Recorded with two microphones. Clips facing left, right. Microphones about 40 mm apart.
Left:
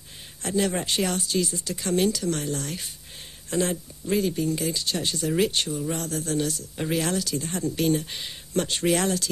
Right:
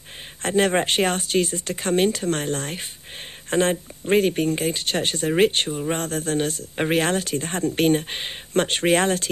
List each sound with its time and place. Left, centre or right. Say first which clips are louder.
0.4 s speech: right 6 dB; right